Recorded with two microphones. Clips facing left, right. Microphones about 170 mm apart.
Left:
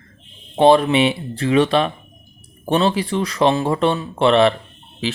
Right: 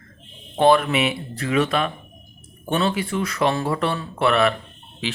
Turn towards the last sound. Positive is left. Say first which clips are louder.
# left 4 dB
turn(degrees=35)  # may be behind; listen again after turning